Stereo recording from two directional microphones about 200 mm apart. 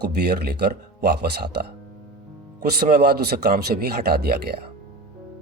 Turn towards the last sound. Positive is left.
turn(degrees=-50)  # may be behind; listen again after turning